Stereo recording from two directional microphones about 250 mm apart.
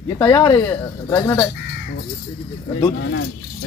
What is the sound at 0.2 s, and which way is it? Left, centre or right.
Speech, centre.